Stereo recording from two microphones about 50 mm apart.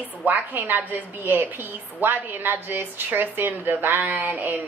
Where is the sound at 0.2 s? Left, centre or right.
Right.